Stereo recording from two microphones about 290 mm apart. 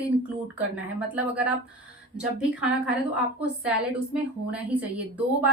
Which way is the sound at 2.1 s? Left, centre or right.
Centre.